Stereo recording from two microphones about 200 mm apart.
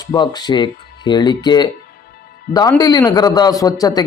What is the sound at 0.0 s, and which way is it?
Speech, 20° left (ahead or behind).